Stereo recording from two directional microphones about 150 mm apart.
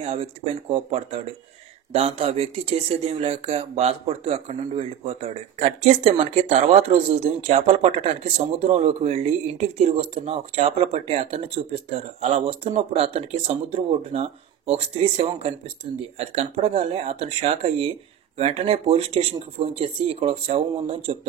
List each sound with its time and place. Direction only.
0.0 s speech: 40° right (ahead or behind)